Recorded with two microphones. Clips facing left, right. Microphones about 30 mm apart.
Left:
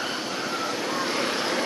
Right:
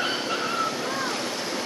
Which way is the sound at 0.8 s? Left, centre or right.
Centre.